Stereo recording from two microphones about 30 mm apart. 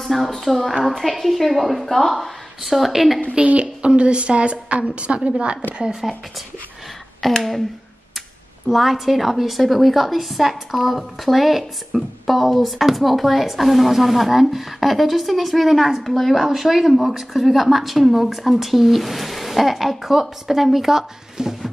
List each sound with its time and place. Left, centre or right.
0.0 s a woman's voice: centre
1.9 s a woman's voice: centre
3.5 s a woman's voice: right
5.9 s speech: centre
7.2 s a woman's voice: centre
8.6 s a woman's voice: centre
16.4 s speech: centre
17.3 s a woman's voice: centre
21.4 s a sound: right